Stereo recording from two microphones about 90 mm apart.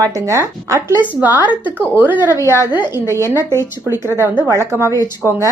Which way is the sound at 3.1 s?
30° right (ahead or behind).